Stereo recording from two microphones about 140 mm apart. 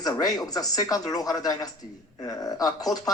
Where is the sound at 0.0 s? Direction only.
25° left (ahead or behind).